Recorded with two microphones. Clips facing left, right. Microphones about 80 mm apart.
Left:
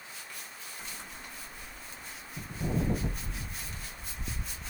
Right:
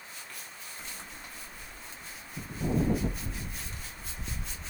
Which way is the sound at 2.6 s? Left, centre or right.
Centre.